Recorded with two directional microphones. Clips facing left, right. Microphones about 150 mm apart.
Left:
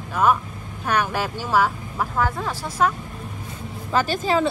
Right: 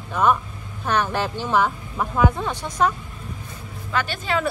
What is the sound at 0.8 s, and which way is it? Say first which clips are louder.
A woman's voice: even; 10° left (ahead or behind).